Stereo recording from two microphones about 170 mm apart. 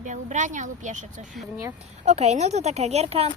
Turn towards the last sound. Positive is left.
turn(degrees=-35)  # may be behind; listen again after turning